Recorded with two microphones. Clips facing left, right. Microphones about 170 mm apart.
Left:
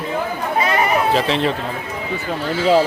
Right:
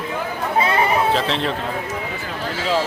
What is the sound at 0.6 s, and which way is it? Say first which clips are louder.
Chatter: even; 25° right (ahead or behind).